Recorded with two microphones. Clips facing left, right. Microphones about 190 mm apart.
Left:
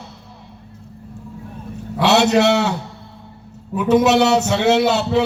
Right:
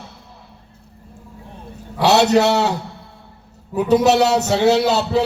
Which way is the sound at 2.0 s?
40° right (ahead or behind).